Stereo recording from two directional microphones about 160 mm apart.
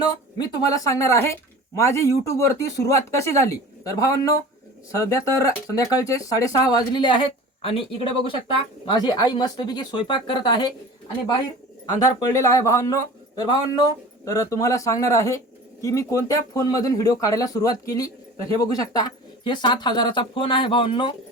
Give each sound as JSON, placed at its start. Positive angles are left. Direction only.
{"t": 0.0, "sound": "speech", "side_deg": 25}
{"t": 12.0, "sound": "speech", "side_deg": 20}